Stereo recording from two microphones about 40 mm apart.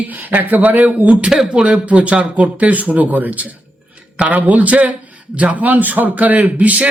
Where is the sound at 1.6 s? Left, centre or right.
Right.